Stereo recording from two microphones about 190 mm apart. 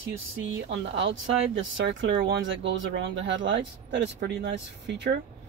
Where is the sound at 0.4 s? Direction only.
70° right (ahead or behind).